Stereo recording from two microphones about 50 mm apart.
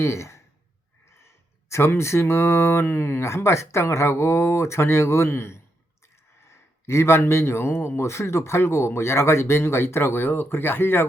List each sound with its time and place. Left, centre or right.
0.0 s speech: left
1.7 s a man's voice: left